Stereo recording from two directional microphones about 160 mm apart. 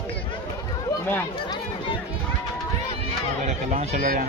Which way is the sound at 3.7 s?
55° right (ahead or behind).